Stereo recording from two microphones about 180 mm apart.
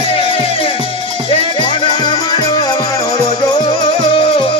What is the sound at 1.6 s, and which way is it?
Music, 25° left (ahead or behind).